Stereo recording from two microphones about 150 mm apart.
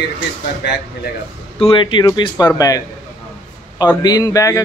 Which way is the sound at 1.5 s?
35° left (ahead or behind).